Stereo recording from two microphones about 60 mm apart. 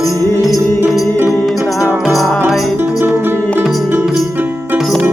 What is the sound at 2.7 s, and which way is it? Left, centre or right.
Music, right.